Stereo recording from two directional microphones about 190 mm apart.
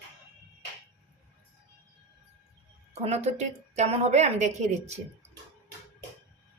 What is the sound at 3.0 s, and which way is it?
A woman's voice, 35° right (ahead or behind).